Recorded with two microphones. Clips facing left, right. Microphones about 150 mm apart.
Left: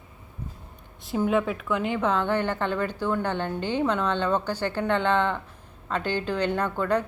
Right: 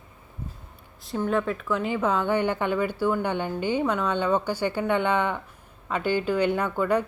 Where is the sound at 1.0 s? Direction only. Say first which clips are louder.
Left 1 dB; 5° left (ahead or behind).